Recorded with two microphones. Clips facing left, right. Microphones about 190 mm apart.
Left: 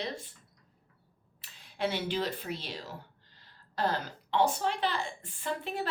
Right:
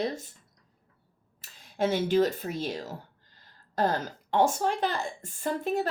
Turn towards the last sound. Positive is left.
turn(degrees=-45)  # may be behind; listen again after turning